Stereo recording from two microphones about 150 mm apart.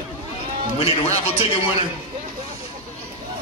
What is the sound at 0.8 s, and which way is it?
Speech, 45° left (ahead or behind).